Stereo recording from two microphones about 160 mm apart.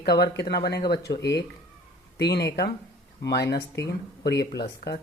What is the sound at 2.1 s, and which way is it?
Speech, 90° left.